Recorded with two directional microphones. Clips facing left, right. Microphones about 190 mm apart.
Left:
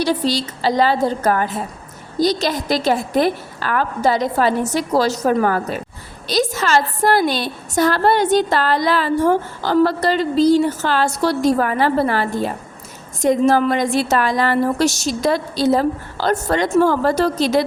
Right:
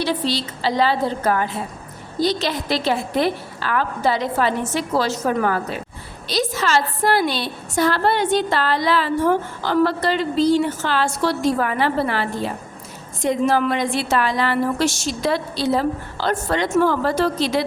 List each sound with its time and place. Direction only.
0.0 s a woman's voice: 40° left (ahead or behind)